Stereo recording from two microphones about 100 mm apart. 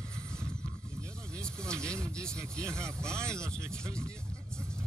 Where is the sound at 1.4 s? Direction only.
10° left (ahead or behind).